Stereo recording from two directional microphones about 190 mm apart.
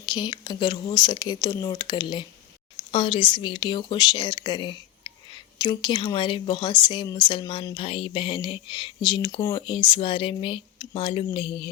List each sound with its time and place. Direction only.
0.0 s speech: 20° left (ahead or behind)